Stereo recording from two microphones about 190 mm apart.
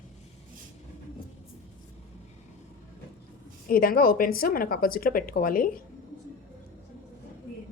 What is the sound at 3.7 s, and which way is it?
Speech, 50° left (ahead or behind).